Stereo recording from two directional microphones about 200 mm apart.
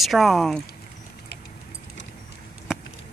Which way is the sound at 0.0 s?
Centre (ahead or behind).